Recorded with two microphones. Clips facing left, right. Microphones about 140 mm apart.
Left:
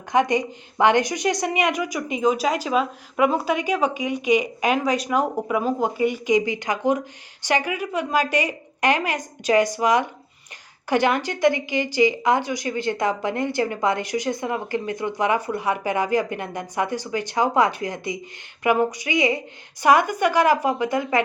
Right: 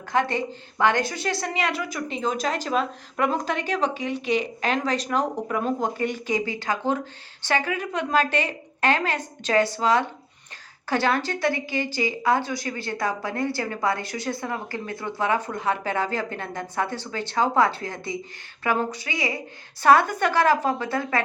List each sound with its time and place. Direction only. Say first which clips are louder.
0.1 s a woman's voice: left 4 dB; 15° left (ahead or behind)